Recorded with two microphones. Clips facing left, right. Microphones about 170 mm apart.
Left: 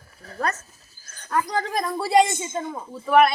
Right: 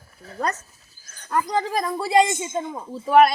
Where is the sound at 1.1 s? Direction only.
Centre (ahead or behind).